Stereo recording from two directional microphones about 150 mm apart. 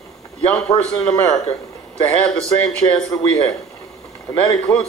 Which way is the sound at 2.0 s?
10° left (ahead or behind).